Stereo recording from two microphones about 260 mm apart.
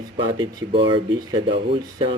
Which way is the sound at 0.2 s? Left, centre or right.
Right.